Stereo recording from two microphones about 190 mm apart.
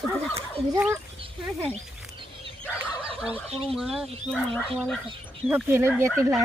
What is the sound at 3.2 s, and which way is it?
Fowl, 5° right (ahead or behind).